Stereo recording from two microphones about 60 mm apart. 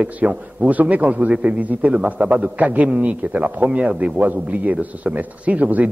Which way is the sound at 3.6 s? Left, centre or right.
Centre.